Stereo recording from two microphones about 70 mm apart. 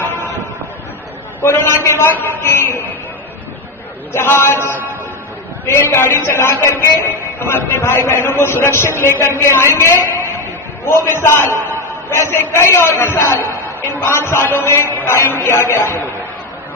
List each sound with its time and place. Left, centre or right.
1.4 s a man's voice: left
4.1 s a man's voice: left